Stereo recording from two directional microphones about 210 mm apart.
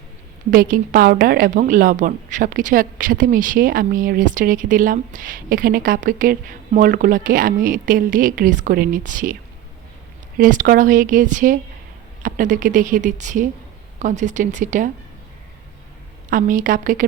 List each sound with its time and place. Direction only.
0.5 s a woman's voice: 40° right (ahead or behind)
16.3 s a woman's voice: 40° right (ahead or behind)